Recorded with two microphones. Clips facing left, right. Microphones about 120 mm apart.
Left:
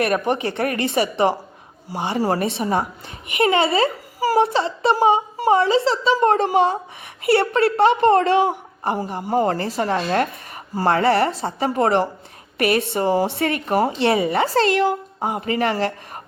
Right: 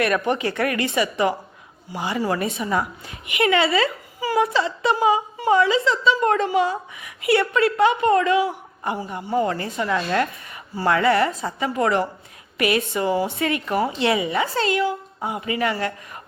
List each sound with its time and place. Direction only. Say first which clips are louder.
0.3 s a woman's voice: left 1 dB; 25° left (ahead or behind); by 14.4 s 50° left (ahead or behind)
14.4 s speech: left 4 dB; 40° left (ahead or behind)